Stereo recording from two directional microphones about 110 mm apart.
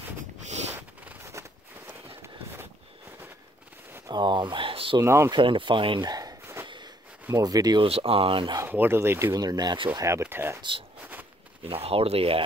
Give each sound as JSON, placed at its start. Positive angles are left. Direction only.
{"t": 0.5, "sound": "a sound", "side_deg": -90}
{"t": 1.4, "sound": "a sound", "side_deg": -25}
{"t": 4.1, "sound": "speech", "side_deg": -45}
{"t": 5.0, "sound": "speech", "side_deg": -25}
{"t": 5.3, "sound": "speech", "side_deg": -50}
{"t": 6.4, "sound": "snort", "side_deg": -20}
{"t": 7.2, "sound": "speech", "side_deg": -35}
{"t": 7.8, "sound": "speech", "side_deg": -60}
{"t": 8.6, "sound": "speech", "side_deg": -20}
{"t": 9.3, "sound": "speech", "side_deg": -35}
{"t": 10.2, "sound": "speech", "side_deg": -20}
{"t": 11.6, "sound": "speech", "side_deg": -60}